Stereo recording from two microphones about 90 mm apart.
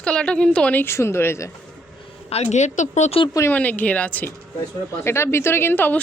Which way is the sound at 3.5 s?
20° left (ahead or behind).